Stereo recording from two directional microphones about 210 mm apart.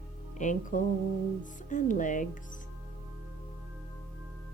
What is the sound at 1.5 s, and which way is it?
Speech, 35° left (ahead or behind).